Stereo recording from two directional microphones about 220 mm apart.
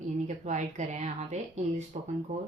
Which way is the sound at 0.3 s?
35° right (ahead or behind).